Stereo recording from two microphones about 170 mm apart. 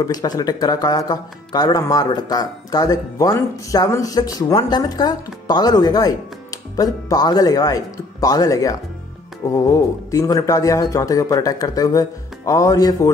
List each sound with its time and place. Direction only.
0.0 s speech: 20° left (ahead or behind)